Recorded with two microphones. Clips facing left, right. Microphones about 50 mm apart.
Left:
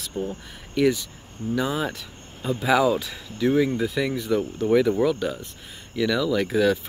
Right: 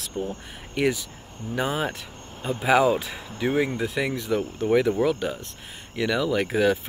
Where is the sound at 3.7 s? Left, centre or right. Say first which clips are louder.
Left 2 dB; centre.